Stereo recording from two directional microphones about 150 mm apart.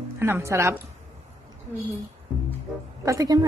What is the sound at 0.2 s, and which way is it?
Speech, 15° right (ahead or behind).